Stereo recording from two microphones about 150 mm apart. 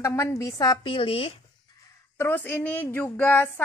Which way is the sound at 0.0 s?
20° left (ahead or behind).